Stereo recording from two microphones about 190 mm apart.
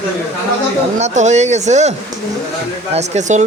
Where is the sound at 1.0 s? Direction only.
35° right (ahead or behind).